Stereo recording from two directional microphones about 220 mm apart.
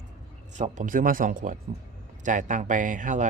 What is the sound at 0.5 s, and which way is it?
A man's voice, 35° right (ahead or behind).